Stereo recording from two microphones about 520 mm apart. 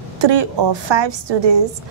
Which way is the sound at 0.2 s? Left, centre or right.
Right.